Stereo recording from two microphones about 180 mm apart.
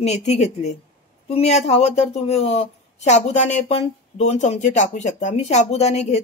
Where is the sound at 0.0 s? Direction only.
40° left (ahead or behind).